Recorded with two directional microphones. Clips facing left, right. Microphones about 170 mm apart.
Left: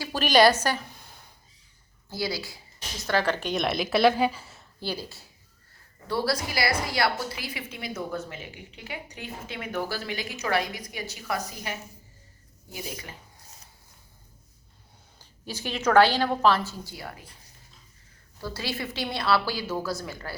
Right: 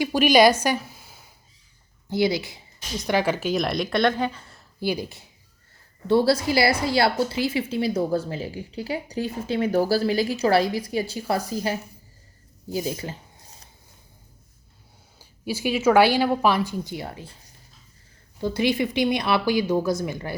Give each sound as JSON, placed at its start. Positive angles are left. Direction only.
{"t": 0.0, "sound": "a woman's voice", "side_deg": -10}
{"t": 2.0, "sound": "speech", "side_deg": -20}
{"t": 4.8, "sound": "a woman's voice", "side_deg": -15}
{"t": 15.2, "sound": "a woman's voice", "side_deg": -10}
{"t": 18.3, "sound": "a woman's voice", "side_deg": -20}